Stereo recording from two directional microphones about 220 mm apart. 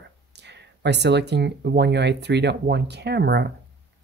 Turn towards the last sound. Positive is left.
turn(degrees=-50)  # may be behind; listen again after turning